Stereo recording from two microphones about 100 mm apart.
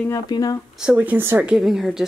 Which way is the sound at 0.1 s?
40° left (ahead or behind).